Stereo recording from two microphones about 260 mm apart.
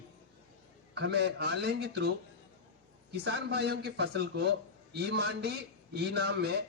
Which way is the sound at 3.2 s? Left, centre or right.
Right.